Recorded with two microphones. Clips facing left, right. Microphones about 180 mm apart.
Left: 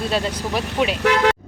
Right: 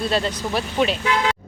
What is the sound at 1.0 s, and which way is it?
Speech, 70° left (ahead or behind).